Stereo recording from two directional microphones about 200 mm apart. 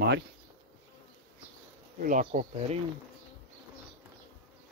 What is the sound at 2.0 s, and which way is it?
Speech, 40° right (ahead or behind).